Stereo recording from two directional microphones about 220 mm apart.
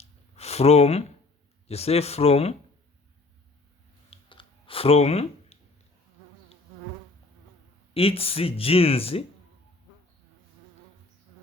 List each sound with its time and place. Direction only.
0.3 s speech: 30° left (ahead or behind)
4.1 s clicking: 25° left (ahead or behind)
7.9 s speech: 25° left (ahead or behind)